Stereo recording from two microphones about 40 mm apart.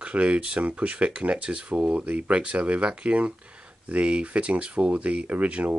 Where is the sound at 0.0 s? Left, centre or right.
Right.